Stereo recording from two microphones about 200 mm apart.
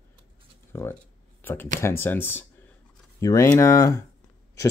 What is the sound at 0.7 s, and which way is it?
Speech, 10° left (ahead or behind).